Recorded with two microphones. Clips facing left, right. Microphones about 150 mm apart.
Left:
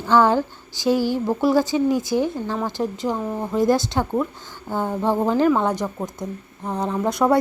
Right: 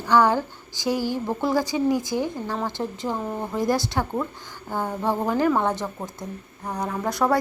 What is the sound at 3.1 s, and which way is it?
Speech, 5° left (ahead or behind).